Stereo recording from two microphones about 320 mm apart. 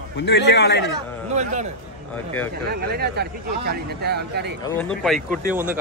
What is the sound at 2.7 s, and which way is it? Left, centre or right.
Speech, right.